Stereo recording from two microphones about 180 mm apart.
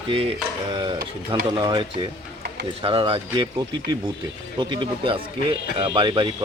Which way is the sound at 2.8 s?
30° right (ahead or behind).